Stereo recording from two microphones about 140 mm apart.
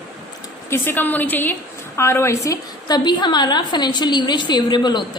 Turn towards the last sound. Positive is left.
turn(degrees=30)  # may be behind; listen again after turning